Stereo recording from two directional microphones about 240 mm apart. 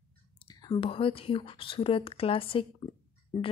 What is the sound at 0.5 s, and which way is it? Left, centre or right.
Speech, left.